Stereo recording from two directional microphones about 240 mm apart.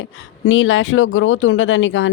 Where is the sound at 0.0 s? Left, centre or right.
Left.